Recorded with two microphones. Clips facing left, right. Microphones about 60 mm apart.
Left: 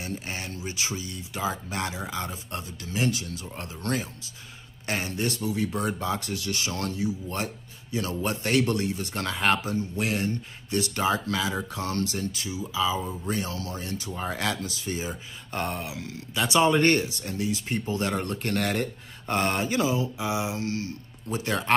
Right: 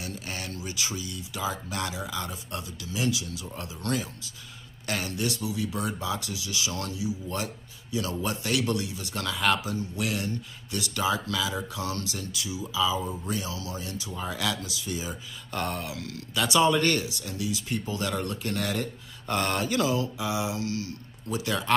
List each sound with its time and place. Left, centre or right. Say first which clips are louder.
0.0 s speech: left 2 dB; left
18.4 s speech: left 3 dB; left
19.2 s speech: left 1 dB; left